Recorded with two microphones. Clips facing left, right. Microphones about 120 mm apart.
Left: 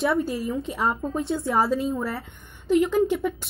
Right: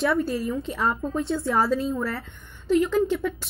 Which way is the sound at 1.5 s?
25° left (ahead or behind).